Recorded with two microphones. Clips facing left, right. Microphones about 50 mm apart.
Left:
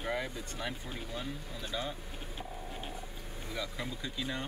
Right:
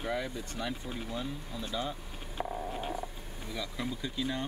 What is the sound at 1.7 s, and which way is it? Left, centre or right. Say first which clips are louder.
Speech: right 2 dB; centre.